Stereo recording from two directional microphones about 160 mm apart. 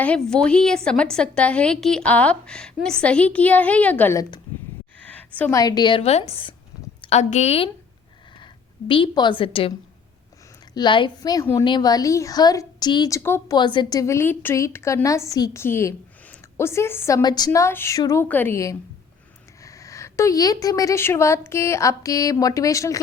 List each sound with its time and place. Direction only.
0.0 s a woman's voice: 5° left (ahead or behind)
5.3 s a woman's voice: 10° left (ahead or behind)
5.5 s a woman's voice: 25° left (ahead or behind); by 7.7 s 40° left (ahead or behind)
8.9 s a woman's voice: 30° left (ahead or behind)
10.8 s a woman's voice: 30° left (ahead or behind)
13.6 s a woman's voice: 30° left (ahead or behind)